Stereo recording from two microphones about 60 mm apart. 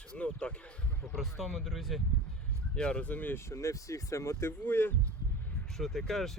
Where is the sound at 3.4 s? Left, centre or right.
Left.